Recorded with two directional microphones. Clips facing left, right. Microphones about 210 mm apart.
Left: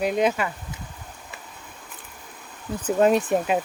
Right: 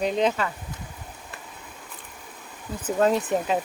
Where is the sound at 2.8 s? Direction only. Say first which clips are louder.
Left 3 dB; 15° left (ahead or behind).